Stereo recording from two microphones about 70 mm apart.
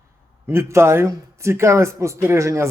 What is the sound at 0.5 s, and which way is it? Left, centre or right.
A man's voice, right.